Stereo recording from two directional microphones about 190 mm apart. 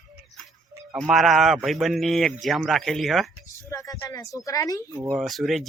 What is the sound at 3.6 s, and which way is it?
Speech, 15° left (ahead or behind).